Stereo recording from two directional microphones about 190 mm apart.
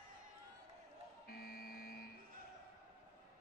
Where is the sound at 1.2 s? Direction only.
50° left (ahead or behind).